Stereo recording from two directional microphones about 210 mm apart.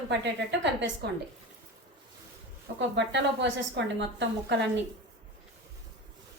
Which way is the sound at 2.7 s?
55° right (ahead or behind).